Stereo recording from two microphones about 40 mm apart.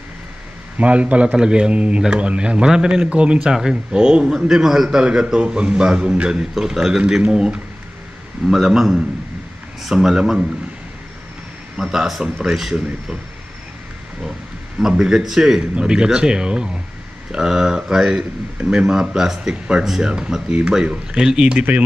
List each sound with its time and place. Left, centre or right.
0.7 s speech: right
1.3 s a man's voice: right
3.5 s a man's voice: centre
6.5 s a man's voice: centre
8.5 s a man's voice: centre
11.7 s a man's voice: centre
14.8 s a man's voice: centre
15.7 s a man's voice: right
19.8 s a man's voice: centre